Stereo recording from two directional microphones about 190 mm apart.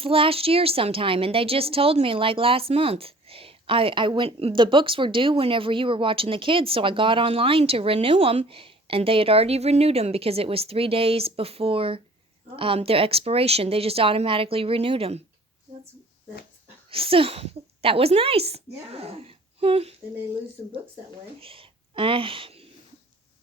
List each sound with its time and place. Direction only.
0.0 s a woman's voice: 30° right (ahead or behind)
16.9 s speech: 30° right (ahead or behind)
21.4 s whispering: 30° right (ahead or behind)